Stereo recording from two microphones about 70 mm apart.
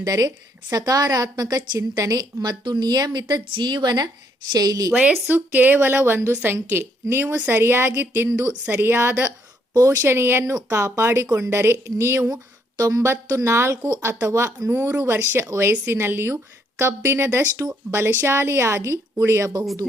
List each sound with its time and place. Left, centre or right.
0.0 s a woman's voice: right
4.5 s a woman's voice: right
5.3 s a woman's voice: right
6.0 s a woman's voice: right
10.4 s speech: right
11.5 s a woman's voice: right
12.8 s speech: right
14.7 s a woman's voice: right